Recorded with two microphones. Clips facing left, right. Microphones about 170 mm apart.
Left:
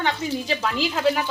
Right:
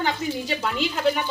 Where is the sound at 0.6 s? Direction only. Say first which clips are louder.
Right 1 dB; centre (ahead or behind).